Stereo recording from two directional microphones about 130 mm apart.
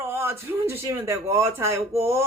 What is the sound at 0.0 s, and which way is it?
A woman's voice, 20° right (ahead or behind).